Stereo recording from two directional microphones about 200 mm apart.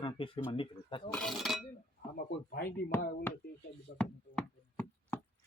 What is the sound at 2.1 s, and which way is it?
Speech, 50° left (ahead or behind).